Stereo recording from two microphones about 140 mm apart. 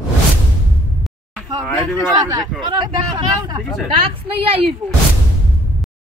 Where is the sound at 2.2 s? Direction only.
30° right (ahead or behind).